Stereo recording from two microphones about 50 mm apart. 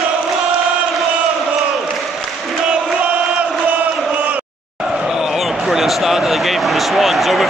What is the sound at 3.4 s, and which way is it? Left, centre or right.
Chant, right.